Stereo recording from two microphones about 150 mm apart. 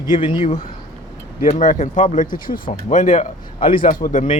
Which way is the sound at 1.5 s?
55° left (ahead or behind).